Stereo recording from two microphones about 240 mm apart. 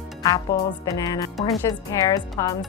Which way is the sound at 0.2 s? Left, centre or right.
Centre.